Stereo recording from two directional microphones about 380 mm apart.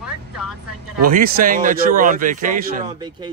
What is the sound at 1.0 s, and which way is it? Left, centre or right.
A man's voice, right.